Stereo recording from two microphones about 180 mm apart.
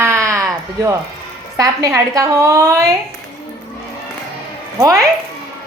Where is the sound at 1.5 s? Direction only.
20° right (ahead or behind).